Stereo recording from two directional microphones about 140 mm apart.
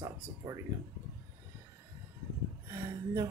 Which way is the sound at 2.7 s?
20° right (ahead or behind).